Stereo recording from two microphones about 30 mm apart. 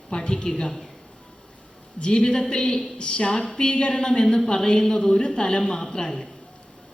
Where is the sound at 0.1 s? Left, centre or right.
Left.